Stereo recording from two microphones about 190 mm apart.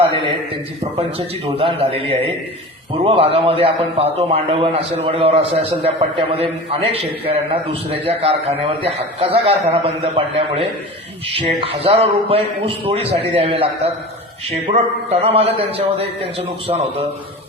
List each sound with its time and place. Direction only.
0.0 s a man's voice: 25° right (ahead or behind)